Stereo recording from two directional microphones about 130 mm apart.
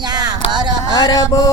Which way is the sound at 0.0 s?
30° right (ahead or behind).